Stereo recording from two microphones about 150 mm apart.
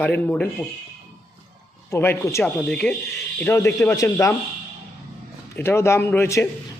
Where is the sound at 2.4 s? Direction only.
5° left (ahead or behind).